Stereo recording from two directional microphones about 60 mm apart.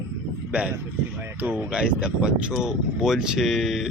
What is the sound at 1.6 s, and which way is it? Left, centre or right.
Speech, centre.